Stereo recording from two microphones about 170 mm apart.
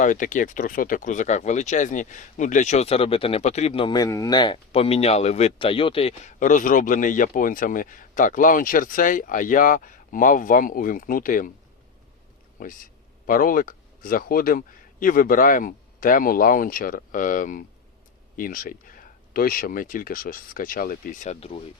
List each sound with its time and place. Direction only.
0.0 s speech: 50° left (ahead or behind)
3.8 s speech: 20° left (ahead or behind)
6.4 s speech: 50° left (ahead or behind)
12.6 s speech: 50° left (ahead or behind)